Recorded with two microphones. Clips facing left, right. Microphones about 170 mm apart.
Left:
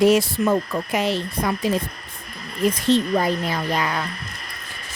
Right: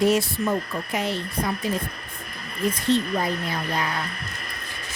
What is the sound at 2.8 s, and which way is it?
Speech, 90° left.